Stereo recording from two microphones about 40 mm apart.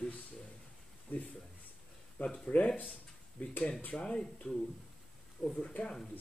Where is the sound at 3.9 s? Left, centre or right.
Left.